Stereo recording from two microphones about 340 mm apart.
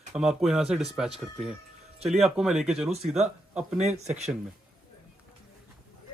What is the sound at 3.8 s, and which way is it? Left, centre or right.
Speech, centre.